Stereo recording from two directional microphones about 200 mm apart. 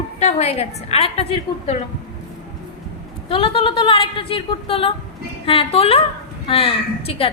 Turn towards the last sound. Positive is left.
turn(degrees=30)  # may be behind; listen again after turning